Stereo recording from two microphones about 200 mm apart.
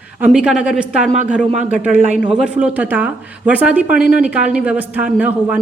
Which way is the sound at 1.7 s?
5° right (ahead or behind).